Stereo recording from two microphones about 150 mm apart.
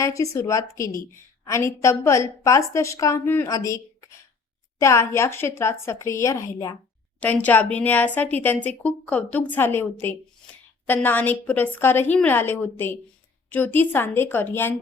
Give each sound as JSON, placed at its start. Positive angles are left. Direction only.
{"t": 0.0, "sound": "a woman's voice", "side_deg": 20}
{"t": 7.2, "sound": "speech", "side_deg": 10}